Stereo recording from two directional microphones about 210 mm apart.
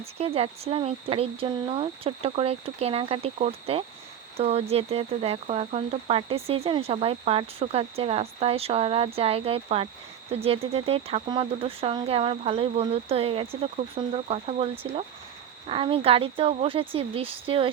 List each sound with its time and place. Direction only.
0.0 s speech: 30° right (ahead or behind)